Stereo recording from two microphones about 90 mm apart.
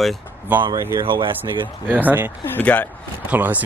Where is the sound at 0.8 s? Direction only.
30° right (ahead or behind).